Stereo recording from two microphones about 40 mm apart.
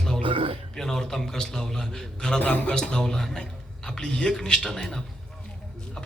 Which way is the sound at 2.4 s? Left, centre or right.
Left.